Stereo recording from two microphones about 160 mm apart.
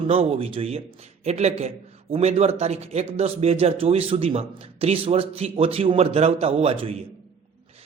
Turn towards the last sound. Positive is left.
turn(degrees=-35)  # may be behind; listen again after turning